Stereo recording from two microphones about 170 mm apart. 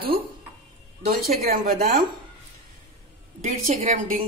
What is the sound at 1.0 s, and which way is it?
A woman's voice, 60° right (ahead or behind).